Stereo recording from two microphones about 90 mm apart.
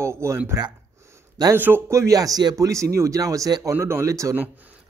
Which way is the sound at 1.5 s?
25° right (ahead or behind).